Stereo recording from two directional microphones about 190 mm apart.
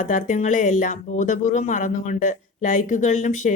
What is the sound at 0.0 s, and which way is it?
Speech, 45° left (ahead or behind).